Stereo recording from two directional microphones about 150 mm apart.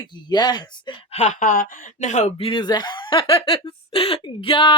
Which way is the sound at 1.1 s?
50° left (ahead or behind).